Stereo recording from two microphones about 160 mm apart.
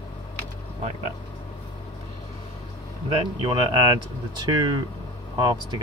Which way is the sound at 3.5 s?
25° right (ahead or behind).